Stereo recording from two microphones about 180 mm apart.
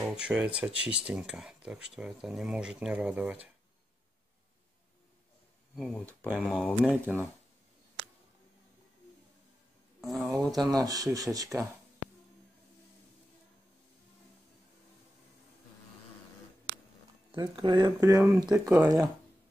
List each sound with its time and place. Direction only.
0.0 s speech: 5° right (ahead or behind)
5.8 s speech: 5° left (ahead or behind)
6.0 s speech: 10° right (ahead or behind)
6.4 s speech: centre (ahead or behind)
9.9 s speech: centre (ahead or behind)
10.8 s speech: 20° right (ahead or behind)
17.6 s speech: 25° right (ahead or behind)